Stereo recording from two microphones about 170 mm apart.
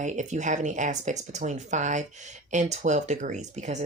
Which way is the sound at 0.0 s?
45° right (ahead or behind).